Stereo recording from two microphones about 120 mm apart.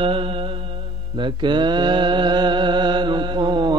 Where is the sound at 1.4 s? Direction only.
40° right (ahead or behind).